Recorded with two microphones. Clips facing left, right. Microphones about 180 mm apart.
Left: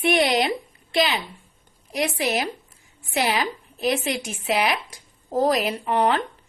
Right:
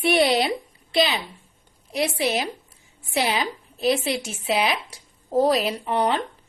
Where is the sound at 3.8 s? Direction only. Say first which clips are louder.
Right 2 dB; 35° right (ahead or behind).